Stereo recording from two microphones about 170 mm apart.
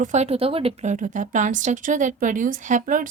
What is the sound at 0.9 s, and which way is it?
Speech, 50° right (ahead or behind).